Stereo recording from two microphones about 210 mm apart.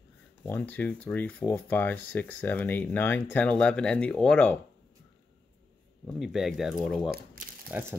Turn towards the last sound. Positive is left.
turn(degrees=-10)  # may be behind; listen again after turning